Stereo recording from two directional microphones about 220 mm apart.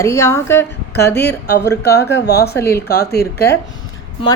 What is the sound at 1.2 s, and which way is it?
Speech, 45° left (ahead or behind).